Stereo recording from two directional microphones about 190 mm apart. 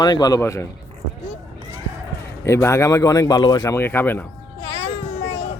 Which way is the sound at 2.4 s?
15° left (ahead or behind).